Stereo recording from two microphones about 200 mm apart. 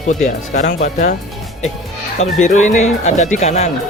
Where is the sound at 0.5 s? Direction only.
40° left (ahead or behind).